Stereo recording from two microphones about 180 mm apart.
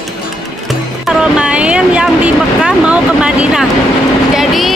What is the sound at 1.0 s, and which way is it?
Vehicle, 5° right (ahead or behind).